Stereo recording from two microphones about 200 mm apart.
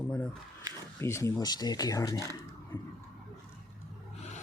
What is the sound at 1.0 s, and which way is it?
Speech, 15° left (ahead or behind).